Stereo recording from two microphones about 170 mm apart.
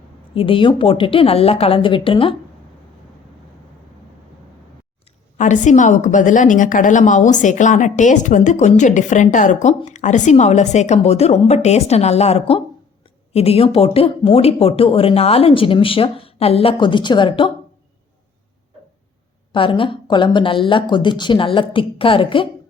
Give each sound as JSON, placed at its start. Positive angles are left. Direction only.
{"t": 0.3, "sound": "speech", "side_deg": 30}
{"t": 5.4, "sound": "a woman's voice", "side_deg": 45}
{"t": 19.5, "sound": "speech", "side_deg": 30}